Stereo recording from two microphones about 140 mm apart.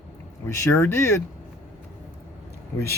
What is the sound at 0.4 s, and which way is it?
Speech, 20° left (ahead or behind).